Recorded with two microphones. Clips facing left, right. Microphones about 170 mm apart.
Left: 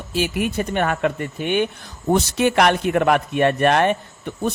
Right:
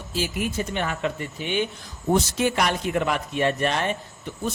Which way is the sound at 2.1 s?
70° left (ahead or behind).